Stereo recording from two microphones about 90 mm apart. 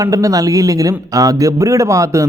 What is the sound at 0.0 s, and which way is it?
Speech, 40° right (ahead or behind).